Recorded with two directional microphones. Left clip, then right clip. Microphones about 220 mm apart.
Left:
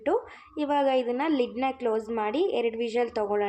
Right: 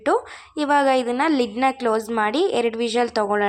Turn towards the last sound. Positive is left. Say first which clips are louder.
# right 6 dB
turn(degrees=-15)  # may be behind; listen again after turning